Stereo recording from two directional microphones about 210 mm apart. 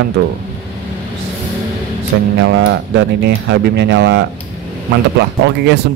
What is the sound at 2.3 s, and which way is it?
A man's voice, 60° right (ahead or behind).